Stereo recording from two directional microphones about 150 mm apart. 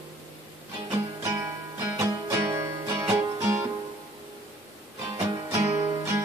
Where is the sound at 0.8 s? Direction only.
20° right (ahead or behind).